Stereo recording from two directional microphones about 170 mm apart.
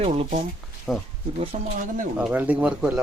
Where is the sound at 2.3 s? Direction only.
10° right (ahead or behind).